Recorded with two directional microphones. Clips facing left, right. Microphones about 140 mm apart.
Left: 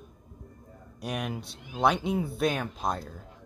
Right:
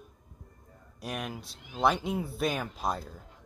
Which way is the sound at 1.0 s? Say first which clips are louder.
Left 3 dB; centre (ahead or behind).